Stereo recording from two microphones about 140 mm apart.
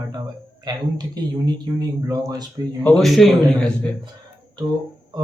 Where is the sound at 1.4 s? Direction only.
25° right (ahead or behind).